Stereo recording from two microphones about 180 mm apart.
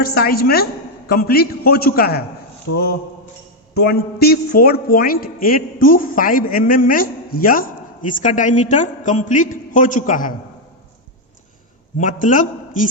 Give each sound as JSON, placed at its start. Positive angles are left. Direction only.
{"t": 0.0, "sound": "a woman's voice", "side_deg": 60}
{"t": 3.8, "sound": "a woman's voice", "side_deg": 60}
{"t": 11.9, "sound": "a woman's voice", "side_deg": 45}